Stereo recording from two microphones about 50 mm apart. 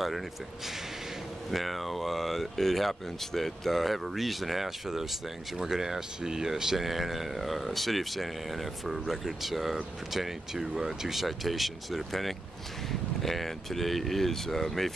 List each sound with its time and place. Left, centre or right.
1.5 s speech: centre